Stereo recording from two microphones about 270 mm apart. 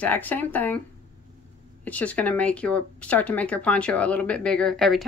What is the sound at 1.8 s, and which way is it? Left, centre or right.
Speech, centre.